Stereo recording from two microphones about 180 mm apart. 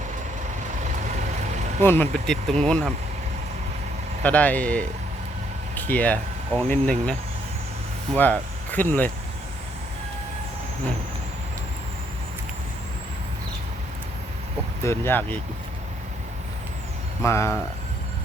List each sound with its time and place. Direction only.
1.8 s speech: 10° left (ahead or behind)
4.2 s speech: 10° left (ahead or behind)
5.7 s a sound: 10° left (ahead or behind)
6.6 s speech: 5° left (ahead or behind)
8.1 s speech: 10° left (ahead or behind)
14.8 s speech: 10° left (ahead or behind)
17.2 s speech: 15° left (ahead or behind)